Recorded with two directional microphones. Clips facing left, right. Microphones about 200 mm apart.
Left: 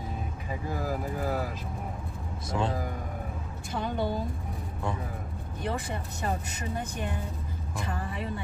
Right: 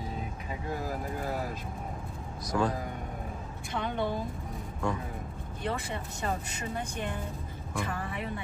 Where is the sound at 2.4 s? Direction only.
25° left (ahead or behind).